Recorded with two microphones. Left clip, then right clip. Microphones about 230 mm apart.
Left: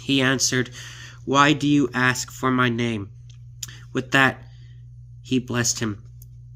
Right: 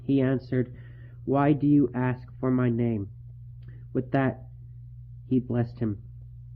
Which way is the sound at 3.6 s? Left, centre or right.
Centre.